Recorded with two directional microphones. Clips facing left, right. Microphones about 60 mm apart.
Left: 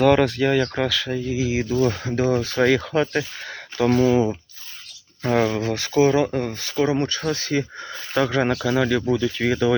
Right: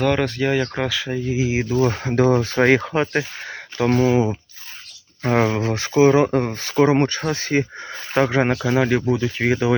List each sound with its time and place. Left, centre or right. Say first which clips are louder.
0.0 s speech: left 3 dB; centre
1.3 s speech: right 2 dB; right
1.9 s speech: right 4 dB; right
3.4 s speech: even; centre
5.2 s speech: right 1 dB; right